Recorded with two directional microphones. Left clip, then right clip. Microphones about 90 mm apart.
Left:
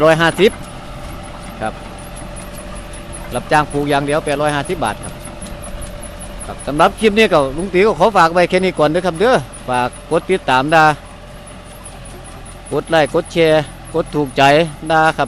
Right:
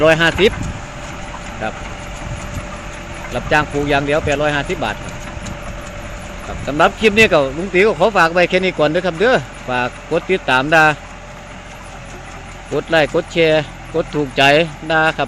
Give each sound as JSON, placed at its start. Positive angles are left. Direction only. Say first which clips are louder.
{"t": 0.0, "sound": "a man's voice", "louder": "left 1 dB", "side_deg": 25}
{"t": 1.6, "sound": "a man's voice", "louder": "left 1 dB", "side_deg": 20}
{"t": 3.3, "sound": "a man's voice", "louder": "left 1 dB", "side_deg": 25}
{"t": 6.7, "sound": "a man's voice", "louder": "left 1 dB", "side_deg": 25}
{"t": 12.7, "sound": "speech", "louder": "left 1 dB", "side_deg": 25}